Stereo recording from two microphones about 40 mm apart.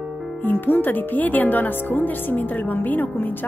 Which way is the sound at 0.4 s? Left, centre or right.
Left.